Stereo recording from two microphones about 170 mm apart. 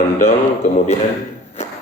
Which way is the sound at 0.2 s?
45° left (ahead or behind).